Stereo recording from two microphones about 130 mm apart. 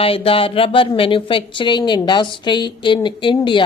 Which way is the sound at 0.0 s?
45° left (ahead or behind).